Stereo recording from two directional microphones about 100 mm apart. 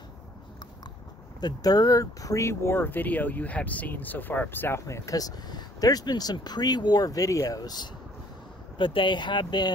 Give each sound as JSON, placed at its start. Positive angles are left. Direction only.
{"t": 1.4, "sound": "speech", "side_deg": 40}
{"t": 8.7, "sound": "speech", "side_deg": 55}